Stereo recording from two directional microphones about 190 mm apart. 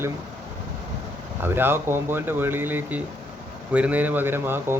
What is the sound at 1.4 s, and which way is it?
Speech, 10° right (ahead or behind).